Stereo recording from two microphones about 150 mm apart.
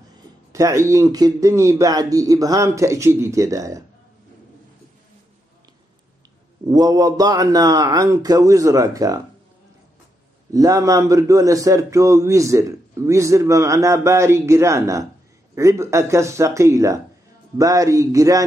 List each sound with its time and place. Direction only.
0.5 s a man's voice: 20° right (ahead or behind)
6.7 s a man's voice: 25° right (ahead or behind)
10.5 s a man's voice: 20° right (ahead or behind)